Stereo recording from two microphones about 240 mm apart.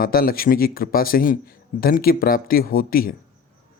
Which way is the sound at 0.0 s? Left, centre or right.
Left.